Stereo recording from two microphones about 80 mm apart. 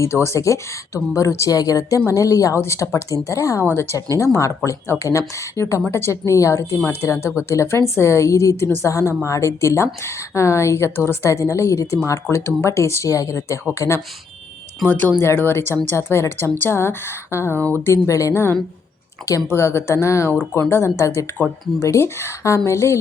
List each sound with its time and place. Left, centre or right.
0.0 s a woman's voice: left
3.7 s speech: left
3.9 s a woman's voice: left
14.8 s a woman's voice: left